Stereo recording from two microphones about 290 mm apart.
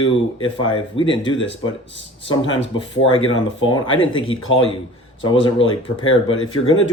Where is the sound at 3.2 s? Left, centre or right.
Left.